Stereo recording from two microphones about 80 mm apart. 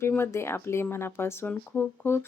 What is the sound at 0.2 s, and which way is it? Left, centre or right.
Speech, left.